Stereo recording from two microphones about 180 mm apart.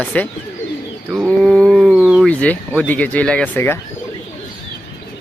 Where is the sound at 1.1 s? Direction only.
Centre (ahead or behind).